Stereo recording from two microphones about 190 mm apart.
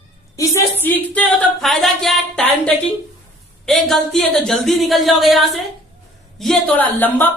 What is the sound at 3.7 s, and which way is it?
Speech, centre (ahead or behind).